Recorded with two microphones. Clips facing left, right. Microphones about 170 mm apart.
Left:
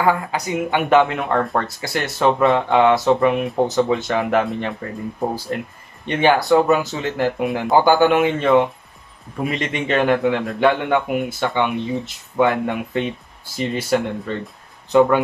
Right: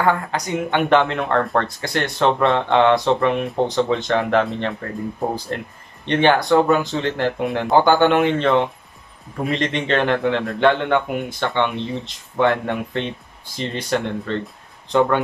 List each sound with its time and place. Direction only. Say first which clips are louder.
0.0 s speech: left 1 dB; 10° left (ahead or behind)
6.0 s speech: even; 5° left (ahead or behind)